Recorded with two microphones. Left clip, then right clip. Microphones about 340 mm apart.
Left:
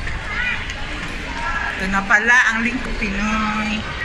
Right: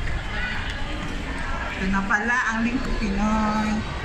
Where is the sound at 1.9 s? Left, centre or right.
Centre.